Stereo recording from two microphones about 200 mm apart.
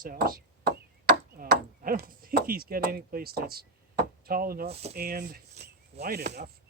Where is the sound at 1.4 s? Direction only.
45° right (ahead or behind).